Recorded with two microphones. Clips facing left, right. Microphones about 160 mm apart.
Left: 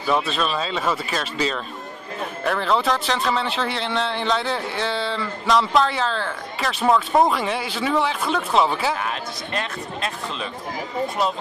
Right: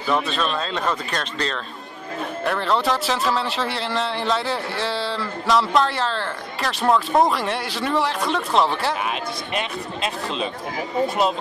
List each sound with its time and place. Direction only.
0.1 s a man's voice: 5° left (ahead or behind)
9.5 s speech: 15° right (ahead or behind)